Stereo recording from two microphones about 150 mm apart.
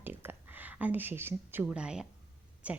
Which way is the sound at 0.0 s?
15° right (ahead or behind).